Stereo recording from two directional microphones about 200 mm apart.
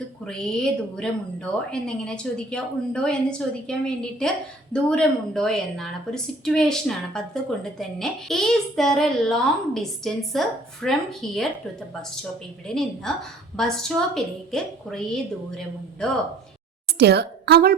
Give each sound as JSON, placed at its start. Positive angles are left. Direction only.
{"t": 0.3, "sound": "a woman's voice", "side_deg": 5}
{"t": 12.6, "sound": "a woman's voice", "side_deg": 5}
{"t": 17.0, "sound": "a woman's voice", "side_deg": -55}